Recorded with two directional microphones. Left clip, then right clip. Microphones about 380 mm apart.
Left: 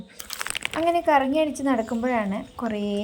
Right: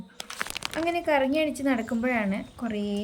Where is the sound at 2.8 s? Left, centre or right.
Centre.